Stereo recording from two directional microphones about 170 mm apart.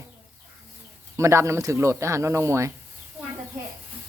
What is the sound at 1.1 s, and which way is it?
Speech, 15° right (ahead or behind).